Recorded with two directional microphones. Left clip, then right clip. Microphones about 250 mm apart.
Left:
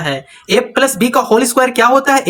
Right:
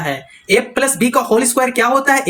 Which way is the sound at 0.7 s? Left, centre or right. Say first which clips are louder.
Left 3 dB; left.